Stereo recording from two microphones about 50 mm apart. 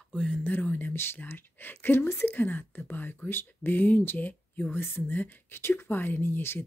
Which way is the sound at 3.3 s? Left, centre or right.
Left.